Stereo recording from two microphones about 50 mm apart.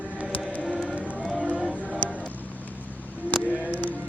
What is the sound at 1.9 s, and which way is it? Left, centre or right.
Music, right.